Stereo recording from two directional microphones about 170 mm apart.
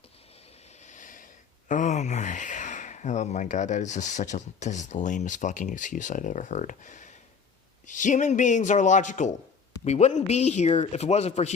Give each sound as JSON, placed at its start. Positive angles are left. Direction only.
{"t": 0.8, "sound": "a man's voice", "side_deg": 45}